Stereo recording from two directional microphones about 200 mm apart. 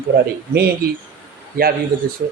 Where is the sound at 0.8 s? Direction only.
50° right (ahead or behind).